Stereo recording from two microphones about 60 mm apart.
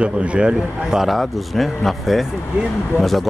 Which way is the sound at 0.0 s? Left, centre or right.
Centre.